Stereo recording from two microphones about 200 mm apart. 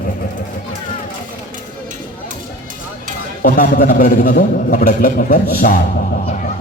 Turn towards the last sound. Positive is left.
turn(degrees=45)  # may be behind; listen again after turning